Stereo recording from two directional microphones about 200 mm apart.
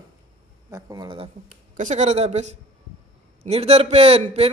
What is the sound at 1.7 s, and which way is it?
A man's voice, 35° right (ahead or behind).